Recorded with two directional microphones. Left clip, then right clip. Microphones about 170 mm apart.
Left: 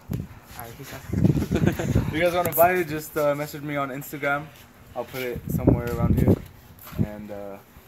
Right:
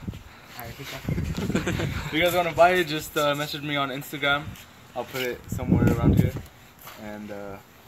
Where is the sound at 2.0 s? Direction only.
10° left (ahead or behind).